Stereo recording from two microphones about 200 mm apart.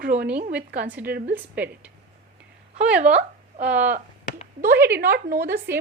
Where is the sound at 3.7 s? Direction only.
10° right (ahead or behind).